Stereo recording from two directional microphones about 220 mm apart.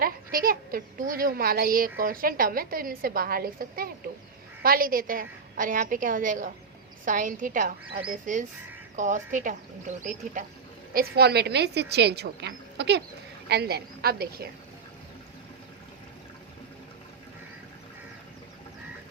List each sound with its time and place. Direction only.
0.0 s speech: 40° right (ahead or behind)
10.9 s a woman's voice: 45° right (ahead or behind)